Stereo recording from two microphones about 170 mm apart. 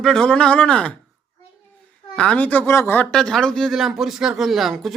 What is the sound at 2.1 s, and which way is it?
Speech, 5° left (ahead or behind).